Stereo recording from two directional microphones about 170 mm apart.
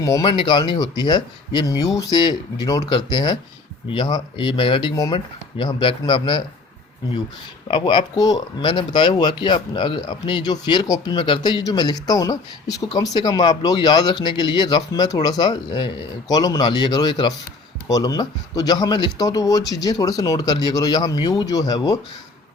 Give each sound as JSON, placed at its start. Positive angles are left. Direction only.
{"t": 0.0, "sound": "speech", "side_deg": 20}
{"t": 7.7, "sound": "speech", "side_deg": 25}